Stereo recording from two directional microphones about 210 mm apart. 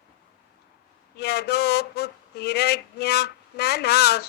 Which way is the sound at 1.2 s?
50° left (ahead or behind).